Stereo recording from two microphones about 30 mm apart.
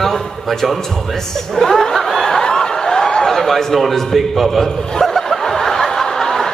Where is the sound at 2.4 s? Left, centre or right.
Left.